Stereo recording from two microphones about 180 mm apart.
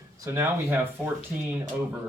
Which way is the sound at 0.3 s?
10° right (ahead or behind).